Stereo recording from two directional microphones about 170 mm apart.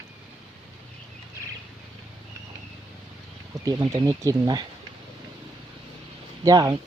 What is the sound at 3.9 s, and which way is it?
Speech, 20° right (ahead or behind).